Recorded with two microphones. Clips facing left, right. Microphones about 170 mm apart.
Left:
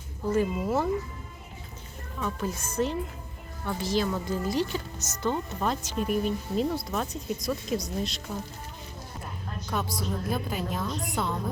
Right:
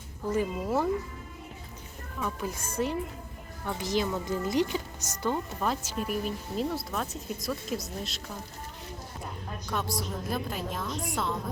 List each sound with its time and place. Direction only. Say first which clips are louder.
0.3 s speech: left 2 dB; 15° right (ahead or behind)
2.2 s speech: left 2 dB; 10° right (ahead or behind)
9.6 s speech: left 2 dB; centre (ahead or behind)